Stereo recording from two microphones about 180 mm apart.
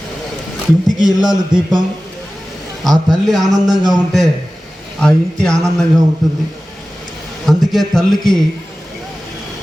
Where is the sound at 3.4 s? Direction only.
20° right (ahead or behind).